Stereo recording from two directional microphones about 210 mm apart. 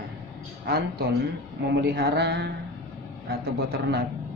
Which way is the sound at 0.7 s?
50° right (ahead or behind).